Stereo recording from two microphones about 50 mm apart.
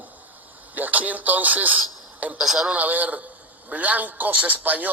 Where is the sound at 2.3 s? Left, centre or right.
Centre.